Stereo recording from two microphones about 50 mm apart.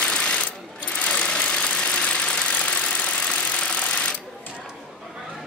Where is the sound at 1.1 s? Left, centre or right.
Left.